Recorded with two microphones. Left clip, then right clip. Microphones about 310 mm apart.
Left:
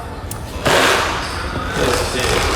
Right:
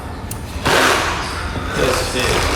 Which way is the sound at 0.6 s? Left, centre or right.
Centre.